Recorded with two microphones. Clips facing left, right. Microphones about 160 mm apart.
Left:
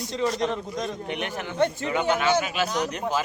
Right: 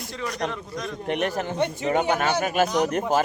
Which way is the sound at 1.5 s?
20° right (ahead or behind).